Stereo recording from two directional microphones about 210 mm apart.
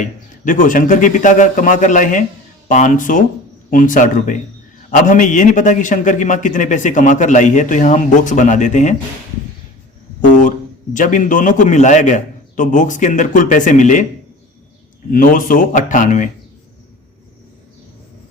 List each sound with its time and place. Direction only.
0.0 s a man's voice: 40° left (ahead or behind)
10.2 s a man's voice: 40° left (ahead or behind)
15.1 s a man's voice: 40° left (ahead or behind)